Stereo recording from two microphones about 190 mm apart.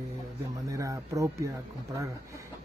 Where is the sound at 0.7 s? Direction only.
15° right (ahead or behind).